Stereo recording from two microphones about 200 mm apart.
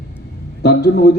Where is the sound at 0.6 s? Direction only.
55° left (ahead or behind).